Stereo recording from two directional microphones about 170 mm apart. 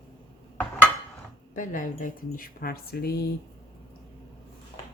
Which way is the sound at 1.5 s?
50° left (ahead or behind).